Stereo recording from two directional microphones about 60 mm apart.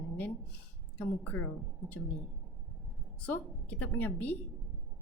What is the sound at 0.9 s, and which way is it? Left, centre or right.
Speech, left.